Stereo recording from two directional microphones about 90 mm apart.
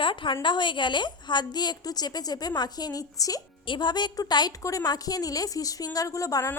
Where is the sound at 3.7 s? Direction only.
60° left (ahead or behind).